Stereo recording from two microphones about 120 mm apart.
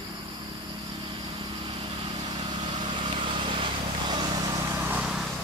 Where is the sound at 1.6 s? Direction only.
40° right (ahead or behind); by 5.0 s 25° right (ahead or behind).